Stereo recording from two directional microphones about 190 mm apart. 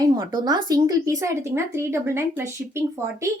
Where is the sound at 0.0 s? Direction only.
20° right (ahead or behind).